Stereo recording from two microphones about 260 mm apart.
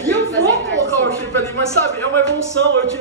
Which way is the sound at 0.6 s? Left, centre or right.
Right.